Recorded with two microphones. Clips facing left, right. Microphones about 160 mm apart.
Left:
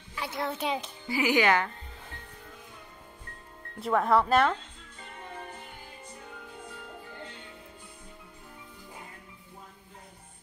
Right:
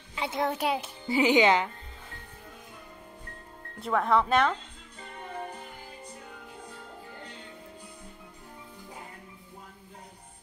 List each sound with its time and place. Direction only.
0.1 s a child's voice: 20° right (ahead or behind)
0.5 s a child's voice: 10° right (ahead or behind)
1.0 s speech: 20° right (ahead or behind)
3.8 s speech: centre (ahead or behind)